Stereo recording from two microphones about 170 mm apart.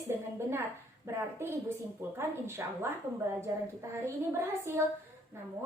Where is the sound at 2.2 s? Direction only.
15° right (ahead or behind).